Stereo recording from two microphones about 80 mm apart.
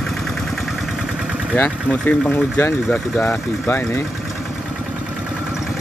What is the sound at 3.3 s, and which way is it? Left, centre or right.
Speech, left.